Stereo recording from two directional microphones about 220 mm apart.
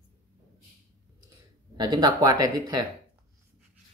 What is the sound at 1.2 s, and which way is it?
Speech, 15° right (ahead or behind).